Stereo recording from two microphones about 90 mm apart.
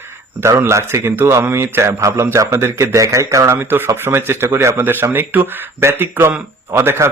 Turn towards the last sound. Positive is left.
turn(degrees=-25)  # may be behind; listen again after turning